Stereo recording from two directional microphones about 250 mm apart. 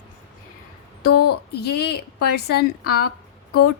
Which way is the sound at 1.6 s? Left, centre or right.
Left.